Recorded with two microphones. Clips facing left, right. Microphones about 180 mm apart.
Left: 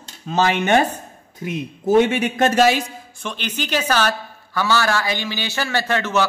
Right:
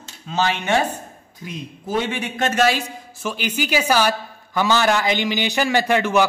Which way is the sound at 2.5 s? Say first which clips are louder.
Left 1 dB; 25° left (ahead or behind).